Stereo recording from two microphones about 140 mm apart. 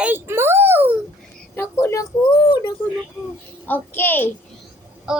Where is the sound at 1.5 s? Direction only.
20° left (ahead or behind).